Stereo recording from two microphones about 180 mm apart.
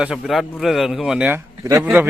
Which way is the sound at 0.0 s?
Centre (ahead or behind).